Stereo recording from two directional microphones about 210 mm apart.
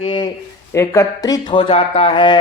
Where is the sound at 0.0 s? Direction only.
20° left (ahead or behind).